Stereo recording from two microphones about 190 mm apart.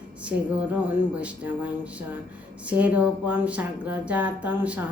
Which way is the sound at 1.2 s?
10° right (ahead or behind).